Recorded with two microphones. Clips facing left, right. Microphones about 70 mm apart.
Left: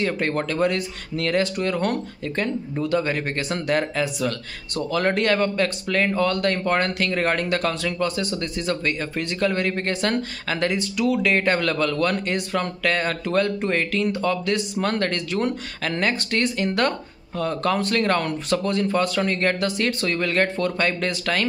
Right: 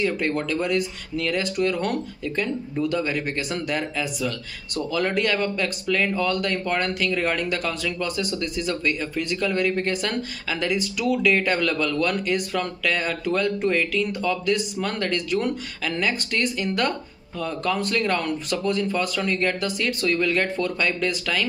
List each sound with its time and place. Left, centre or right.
0.0 s speech: left
10.7 s speech: left